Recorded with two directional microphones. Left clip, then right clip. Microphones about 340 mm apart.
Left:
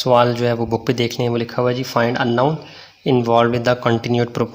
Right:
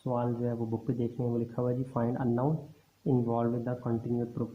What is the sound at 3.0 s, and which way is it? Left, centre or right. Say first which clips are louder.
Speech: left 15 dB; left.